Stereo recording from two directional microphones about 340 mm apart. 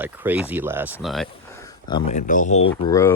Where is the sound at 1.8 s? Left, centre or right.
Centre.